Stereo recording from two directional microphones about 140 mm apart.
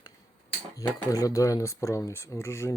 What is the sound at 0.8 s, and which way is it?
Dishes, 15° left (ahead or behind).